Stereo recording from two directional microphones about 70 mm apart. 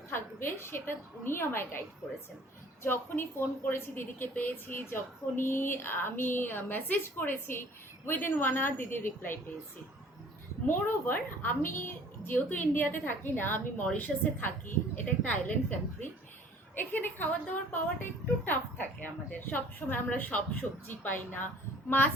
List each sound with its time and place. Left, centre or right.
0.1 s a woman's voice: left
2.8 s a woman's voice: left
10.7 s a woman's voice: left
16.7 s a woman's voice: left